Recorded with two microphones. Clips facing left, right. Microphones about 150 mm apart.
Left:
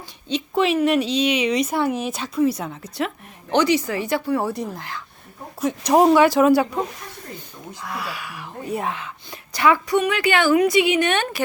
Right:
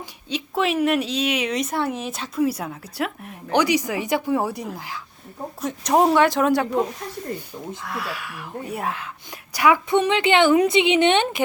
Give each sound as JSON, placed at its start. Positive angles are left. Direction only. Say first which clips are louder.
{"t": 0.3, "sound": "a woman's voice", "louder": "left 3 dB", "side_deg": -5}
{"t": 7.9, "sound": "a woman's voice", "louder": "left 3 dB", "side_deg": 0}
{"t": 9.9, "sound": "a woman's voice", "louder": "right 1 dB", "side_deg": -25}